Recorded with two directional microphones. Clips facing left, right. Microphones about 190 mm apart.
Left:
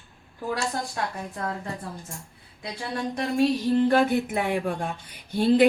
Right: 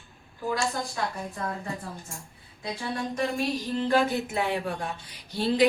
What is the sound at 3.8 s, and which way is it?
Speech, 55° left (ahead or behind).